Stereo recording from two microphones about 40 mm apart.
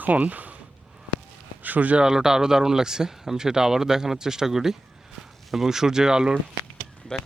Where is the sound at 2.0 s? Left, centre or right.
Centre.